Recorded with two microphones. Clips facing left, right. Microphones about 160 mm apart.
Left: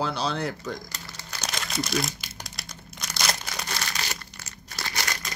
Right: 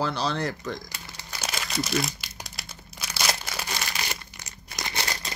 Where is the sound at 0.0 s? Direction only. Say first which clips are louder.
Right 1 dB; centre (ahead or behind).